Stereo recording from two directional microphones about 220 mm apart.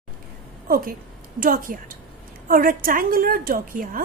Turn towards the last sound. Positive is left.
turn(degrees=-40)  # may be behind; listen again after turning